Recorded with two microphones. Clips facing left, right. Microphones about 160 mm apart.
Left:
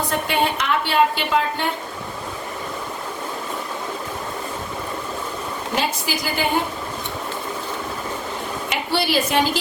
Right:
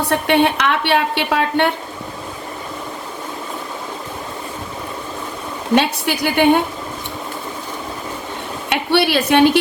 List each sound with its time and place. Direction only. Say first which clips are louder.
0.1 s a woman's voice: right 9 dB; 70° right (ahead or behind)
5.7 s a woman's voice: right 8 dB; 70° right (ahead or behind)
8.7 s a woman's voice: right 6 dB; 65° right (ahead or behind)